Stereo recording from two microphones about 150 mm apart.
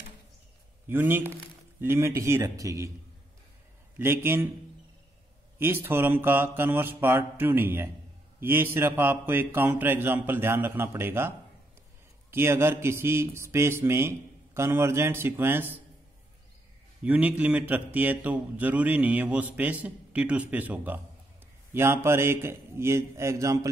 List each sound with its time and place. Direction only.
0.8 s speech: 15° right (ahead or behind)
4.0 s speech: 15° right (ahead or behind)
5.6 s speech: 15° right (ahead or behind)
17.0 s speech: 10° right (ahead or behind)